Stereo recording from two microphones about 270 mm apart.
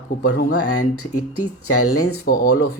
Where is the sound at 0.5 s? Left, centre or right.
Left.